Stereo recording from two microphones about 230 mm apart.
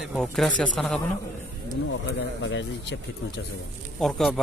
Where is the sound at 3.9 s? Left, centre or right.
Centre.